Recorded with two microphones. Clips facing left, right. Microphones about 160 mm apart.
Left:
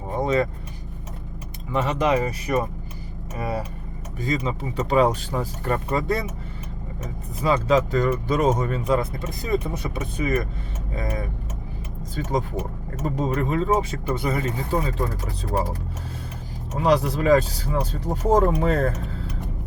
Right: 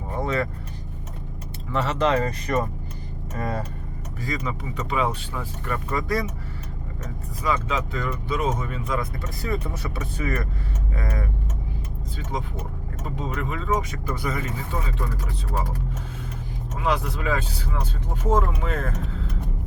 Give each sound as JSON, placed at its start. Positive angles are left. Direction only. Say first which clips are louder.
{"t": 0.1, "sound": "vehicle", "louder": "left 4 dB", "side_deg": 20}
{"t": 1.7, "sound": "speech", "louder": "left 1 dB", "side_deg": 15}
{"t": 4.2, "sound": "speech", "louder": "left 4 dB", "side_deg": 25}
{"t": 5.9, "sound": "speech", "louder": "even", "side_deg": 25}
{"t": 7.4, "sound": "speech", "louder": "left 6 dB", "side_deg": 35}
{"t": 9.0, "sound": "speech", "louder": "left 3 dB", "side_deg": 20}
{"t": 12.1, "sound": "speech", "louder": "left 7 dB", "side_deg": 45}
{"t": 16.7, "sound": "speech", "louder": "left 6 dB", "side_deg": 40}